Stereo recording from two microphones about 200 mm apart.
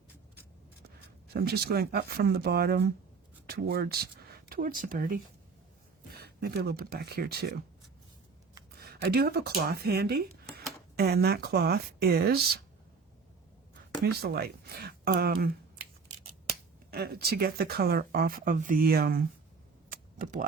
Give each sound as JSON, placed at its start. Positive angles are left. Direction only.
{"t": 1.3, "sound": "speech", "side_deg": -50}
{"t": 8.8, "sound": "speech", "side_deg": -50}
{"t": 14.0, "sound": "speech", "side_deg": -50}
{"t": 16.9, "sound": "speech", "side_deg": -50}
{"t": 19.9, "sound": "typing", "side_deg": -40}